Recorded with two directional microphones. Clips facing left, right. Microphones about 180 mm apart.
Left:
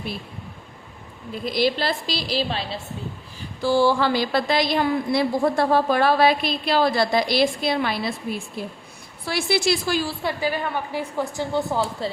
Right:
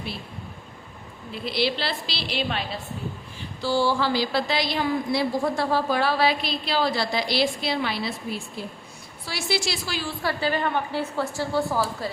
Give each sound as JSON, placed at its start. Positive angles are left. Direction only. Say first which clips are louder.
{"t": 1.3, "sound": "a woman's voice", "louder": "left 4 dB", "side_deg": 45}
{"t": 3.6, "sound": "a woman's voice", "louder": "left 4 dB", "side_deg": 55}
{"t": 9.2, "sound": "a woman's voice", "louder": "left 6 dB", "side_deg": 55}
{"t": 10.2, "sound": "a woman's voice", "louder": "even", "side_deg": 10}